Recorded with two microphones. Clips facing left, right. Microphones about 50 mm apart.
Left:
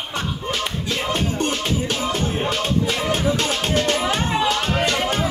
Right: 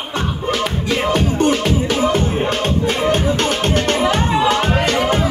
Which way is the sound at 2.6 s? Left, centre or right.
Right.